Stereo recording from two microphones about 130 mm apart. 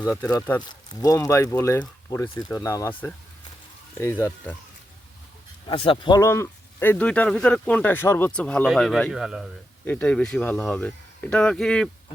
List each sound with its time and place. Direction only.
0.3 s speech: 25° left (ahead or behind)
4.0 s speech: 15° left (ahead or behind)
5.6 s speech: 40° left (ahead or behind)
6.1 s speech: 20° left (ahead or behind)
8.3 s speech: 10° left (ahead or behind)
9.8 s speech: 10° left (ahead or behind)